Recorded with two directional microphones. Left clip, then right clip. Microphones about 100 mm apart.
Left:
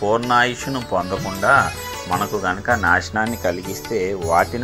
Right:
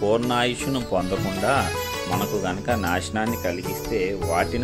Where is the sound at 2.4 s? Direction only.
90° right.